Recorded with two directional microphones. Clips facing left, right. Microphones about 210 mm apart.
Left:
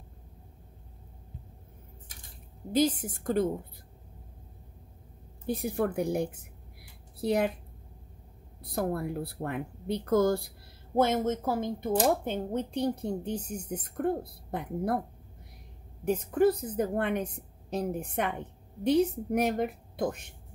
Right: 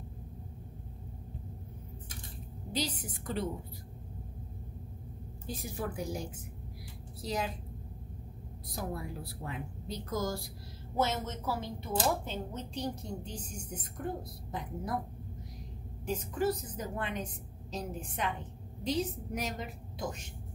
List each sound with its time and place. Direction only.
2.7 s a woman's voice: 50° left (ahead or behind)
5.5 s a woman's voice: 60° left (ahead or behind)
8.6 s a woman's voice: 60° left (ahead or behind)
16.1 s a woman's voice: 55° left (ahead or behind)